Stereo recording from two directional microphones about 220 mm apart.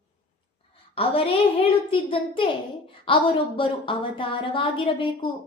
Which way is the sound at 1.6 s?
25° left (ahead or behind).